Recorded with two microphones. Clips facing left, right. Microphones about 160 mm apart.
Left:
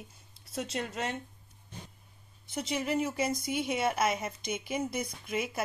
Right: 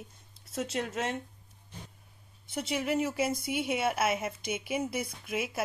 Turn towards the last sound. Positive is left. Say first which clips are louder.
# even
turn(degrees=-5)  # may be behind; listen again after turning